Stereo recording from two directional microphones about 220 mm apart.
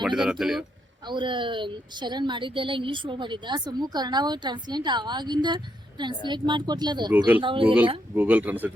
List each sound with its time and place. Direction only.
0.0 s speech: centre (ahead or behind)
1.0 s a woman's voice: 20° right (ahead or behind)
8.1 s speech: 10° right (ahead or behind)